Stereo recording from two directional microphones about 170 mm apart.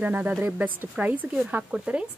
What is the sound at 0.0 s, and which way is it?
Speech, 10° right (ahead or behind).